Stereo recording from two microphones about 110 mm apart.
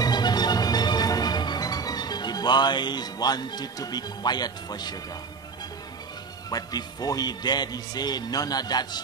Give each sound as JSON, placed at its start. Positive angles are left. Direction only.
{"t": 0.0, "sound": "music", "side_deg": 40}
{"t": 6.5, "sound": "speech", "side_deg": 35}